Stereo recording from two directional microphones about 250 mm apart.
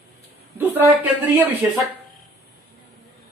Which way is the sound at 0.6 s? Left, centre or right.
Centre.